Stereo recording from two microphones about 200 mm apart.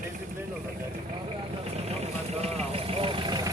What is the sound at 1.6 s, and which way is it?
Vehicle, 30° right (ahead or behind).